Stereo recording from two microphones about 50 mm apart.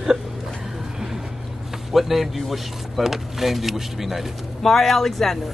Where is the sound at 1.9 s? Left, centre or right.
Centre.